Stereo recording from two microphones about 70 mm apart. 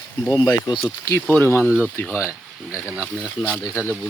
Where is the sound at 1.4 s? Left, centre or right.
Left.